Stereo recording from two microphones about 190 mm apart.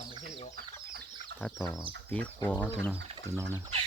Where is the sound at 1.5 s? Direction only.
15° left (ahead or behind).